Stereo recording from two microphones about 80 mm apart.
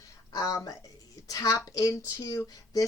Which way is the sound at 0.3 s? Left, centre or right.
Left.